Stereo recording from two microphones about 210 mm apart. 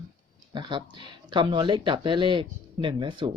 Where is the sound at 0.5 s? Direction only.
20° right (ahead or behind).